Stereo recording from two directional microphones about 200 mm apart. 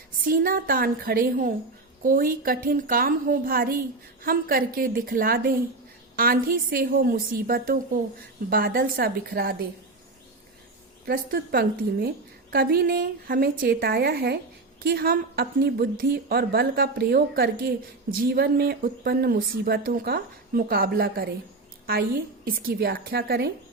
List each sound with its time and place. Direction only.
0.3 s speech: 45° right (ahead or behind)
11.0 s speech: 45° right (ahead or behind)